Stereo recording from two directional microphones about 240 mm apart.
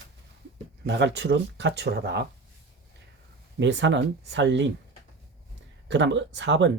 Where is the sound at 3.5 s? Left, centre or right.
Right.